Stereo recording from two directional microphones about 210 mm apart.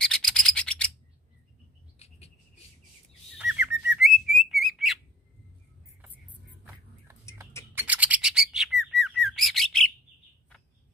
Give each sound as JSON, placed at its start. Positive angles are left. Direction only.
{"t": 0.0, "sound": "rub", "side_deg": 0}
{"t": 2.0, "sound": "a sound", "side_deg": 30}
{"t": 3.3, "sound": "bird", "side_deg": -5}
{"t": 6.0, "sound": "vehicle", "side_deg": -10}
{"t": 7.7, "sound": "bird", "side_deg": -5}